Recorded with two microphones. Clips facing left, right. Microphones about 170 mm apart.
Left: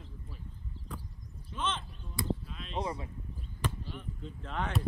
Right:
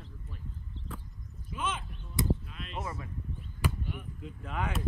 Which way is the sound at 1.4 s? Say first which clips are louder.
Even; 10° right (ahead or behind).